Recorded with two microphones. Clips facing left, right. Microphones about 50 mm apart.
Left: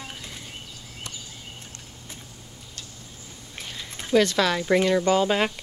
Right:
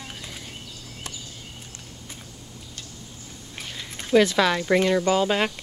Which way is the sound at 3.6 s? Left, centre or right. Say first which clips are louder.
Even; centre.